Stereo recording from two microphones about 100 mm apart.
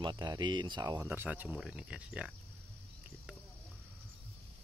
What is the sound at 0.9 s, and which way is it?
Speech, 15° right (ahead or behind).